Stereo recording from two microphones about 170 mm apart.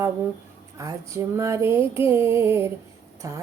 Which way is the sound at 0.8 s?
20° right (ahead or behind).